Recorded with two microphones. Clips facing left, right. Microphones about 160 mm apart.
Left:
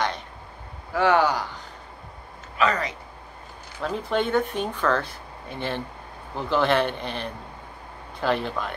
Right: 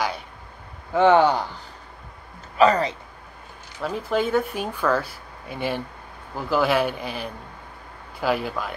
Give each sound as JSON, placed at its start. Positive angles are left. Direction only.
{"t": 0.9, "sound": "speech", "side_deg": -25}
{"t": 2.5, "sound": "speech", "side_deg": -35}
{"t": 3.8, "sound": "speech", "side_deg": -5}